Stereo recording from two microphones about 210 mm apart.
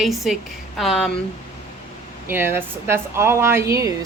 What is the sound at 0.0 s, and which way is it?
Speech, centre (ahead or behind).